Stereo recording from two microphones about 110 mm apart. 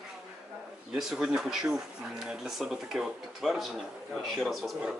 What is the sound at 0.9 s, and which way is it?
Speech, 5° right (ahead or behind).